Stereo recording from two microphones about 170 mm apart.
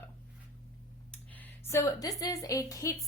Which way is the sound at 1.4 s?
15° left (ahead or behind).